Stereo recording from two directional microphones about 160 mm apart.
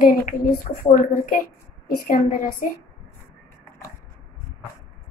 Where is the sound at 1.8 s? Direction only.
60° left (ahead or behind).